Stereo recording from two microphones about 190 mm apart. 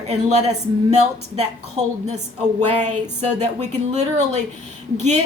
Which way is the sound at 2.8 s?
40° right (ahead or behind).